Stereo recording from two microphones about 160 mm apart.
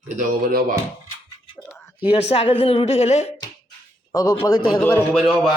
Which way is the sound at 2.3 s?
35° left (ahead or behind).